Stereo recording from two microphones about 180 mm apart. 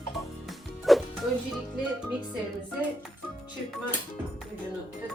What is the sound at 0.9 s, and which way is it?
Music, centre (ahead or behind).